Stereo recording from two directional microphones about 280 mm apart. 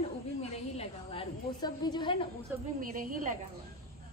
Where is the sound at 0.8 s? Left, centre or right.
Centre.